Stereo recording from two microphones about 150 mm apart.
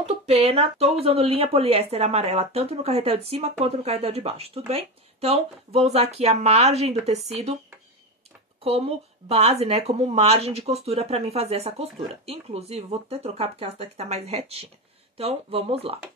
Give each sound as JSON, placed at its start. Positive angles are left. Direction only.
{"t": 0.0, "sound": "speech", "side_deg": -45}
{"t": 8.6, "sound": "speech", "side_deg": -40}